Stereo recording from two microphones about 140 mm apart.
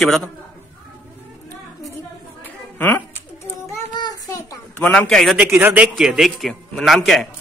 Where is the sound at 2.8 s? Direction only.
15° left (ahead or behind).